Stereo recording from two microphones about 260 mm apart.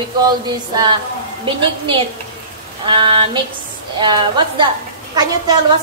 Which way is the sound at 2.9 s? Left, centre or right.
Centre.